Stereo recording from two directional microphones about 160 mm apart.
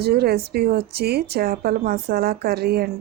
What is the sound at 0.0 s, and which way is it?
A woman's voice, 80° right.